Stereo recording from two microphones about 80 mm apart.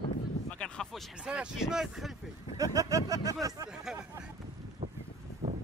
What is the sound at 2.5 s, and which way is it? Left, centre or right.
Speech, right.